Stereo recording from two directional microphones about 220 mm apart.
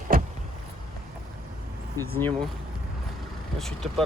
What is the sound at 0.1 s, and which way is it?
Vehicle, 40° right (ahead or behind).